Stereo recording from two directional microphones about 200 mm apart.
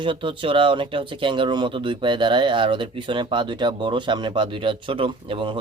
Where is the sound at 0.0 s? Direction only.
25° right (ahead or behind).